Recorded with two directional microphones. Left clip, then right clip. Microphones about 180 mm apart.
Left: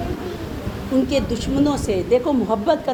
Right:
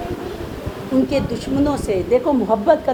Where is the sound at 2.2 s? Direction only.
20° left (ahead or behind).